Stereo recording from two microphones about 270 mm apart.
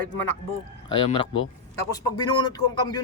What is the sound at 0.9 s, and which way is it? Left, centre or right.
A man's voice, centre.